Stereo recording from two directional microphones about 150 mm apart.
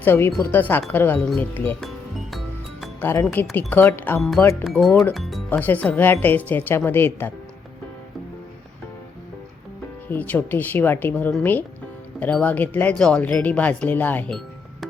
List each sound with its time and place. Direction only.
0.0 s speech: 15° left (ahead or behind)
3.0 s speech: 15° left (ahead or behind)
4.2 s speech: centre (ahead or behind)
5.5 s speech: 10° left (ahead or behind)
10.1 s speech: 10° left (ahead or behind)